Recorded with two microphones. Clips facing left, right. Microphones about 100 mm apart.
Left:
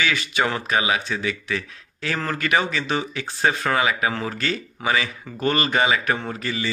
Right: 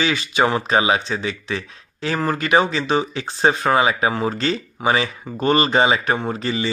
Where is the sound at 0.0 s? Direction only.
20° right (ahead or behind).